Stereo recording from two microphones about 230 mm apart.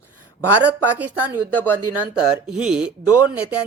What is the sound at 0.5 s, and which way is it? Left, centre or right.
Speech, centre.